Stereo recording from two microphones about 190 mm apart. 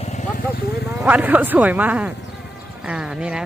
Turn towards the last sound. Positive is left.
turn(degrees=-5)  # may be behind; listen again after turning